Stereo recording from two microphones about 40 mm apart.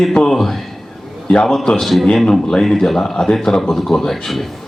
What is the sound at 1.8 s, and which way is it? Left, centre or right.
Speech, centre.